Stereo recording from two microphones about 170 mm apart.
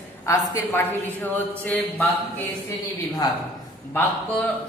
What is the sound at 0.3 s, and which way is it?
Speech, 15° left (ahead or behind).